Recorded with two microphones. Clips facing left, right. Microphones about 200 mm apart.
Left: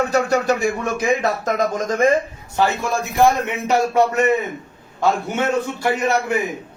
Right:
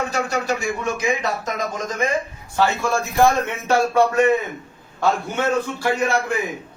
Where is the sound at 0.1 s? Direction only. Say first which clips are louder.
Left 5 dB; 55° left (ahead or behind).